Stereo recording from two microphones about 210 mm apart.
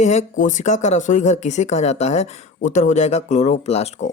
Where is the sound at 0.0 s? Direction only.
35° left (ahead or behind).